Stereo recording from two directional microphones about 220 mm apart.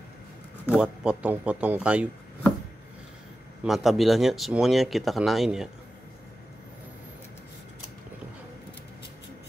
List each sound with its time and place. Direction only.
0.7 s speech: 5° right (ahead or behind)
3.6 s speech: centre (ahead or behind)